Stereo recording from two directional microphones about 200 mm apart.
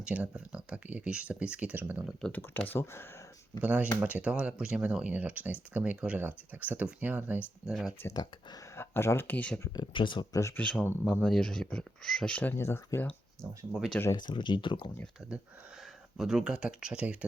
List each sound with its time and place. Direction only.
0.0 s speech: 5° right (ahead or behind)
2.3 s speech: 10° left (ahead or behind)
3.6 s speech: 5° right (ahead or behind)
8.0 s speech: 20° left (ahead or behind)
9.7 s speech: 25° left (ahead or behind)
13.4 s speech: 15° right (ahead or behind)
13.7 s speech: centre (ahead or behind)
14.0 s speech: 20° left (ahead or behind)
15.2 s speech: centre (ahead or behind)